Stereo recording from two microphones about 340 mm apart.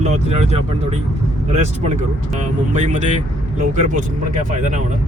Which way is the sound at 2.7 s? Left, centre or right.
Right.